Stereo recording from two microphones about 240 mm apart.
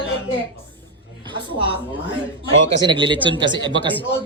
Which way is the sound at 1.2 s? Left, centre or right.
Centre.